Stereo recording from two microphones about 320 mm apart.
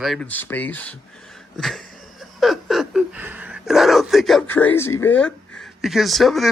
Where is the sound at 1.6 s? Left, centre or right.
Centre.